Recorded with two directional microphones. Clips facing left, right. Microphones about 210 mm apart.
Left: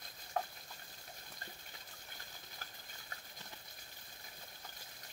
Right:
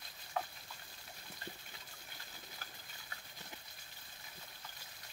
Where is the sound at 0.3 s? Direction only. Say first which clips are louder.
Left 1 dB; 45° left (ahead or behind).